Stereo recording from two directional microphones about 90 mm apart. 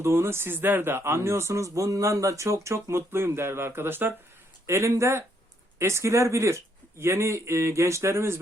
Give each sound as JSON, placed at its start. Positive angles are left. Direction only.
{"t": 0.0, "sound": "speech", "side_deg": -30}